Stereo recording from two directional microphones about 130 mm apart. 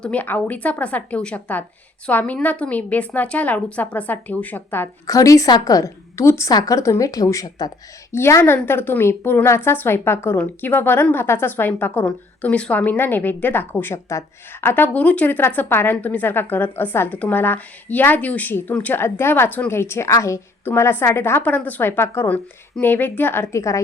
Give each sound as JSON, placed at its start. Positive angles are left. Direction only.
{"t": 0.0, "sound": "a woman's voice", "side_deg": 10}
{"t": 5.0, "sound": "a woman's voice", "side_deg": 25}